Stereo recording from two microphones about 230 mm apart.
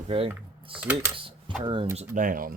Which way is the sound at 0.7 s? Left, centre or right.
Centre.